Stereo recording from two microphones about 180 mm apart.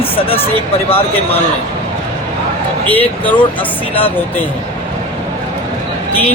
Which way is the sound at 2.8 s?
10° left (ahead or behind).